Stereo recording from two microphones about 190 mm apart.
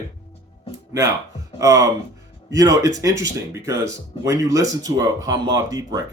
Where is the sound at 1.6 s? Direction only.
15° right (ahead or behind).